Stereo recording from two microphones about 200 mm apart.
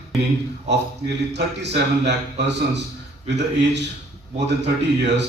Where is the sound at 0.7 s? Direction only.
60° right (ahead or behind).